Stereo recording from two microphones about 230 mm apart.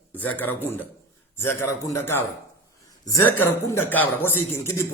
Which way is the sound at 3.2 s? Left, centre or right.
Centre.